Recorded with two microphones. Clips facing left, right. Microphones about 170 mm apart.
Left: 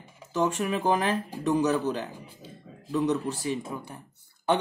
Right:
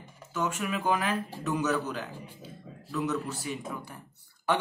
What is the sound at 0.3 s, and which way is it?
Speech, 35° left (ahead or behind).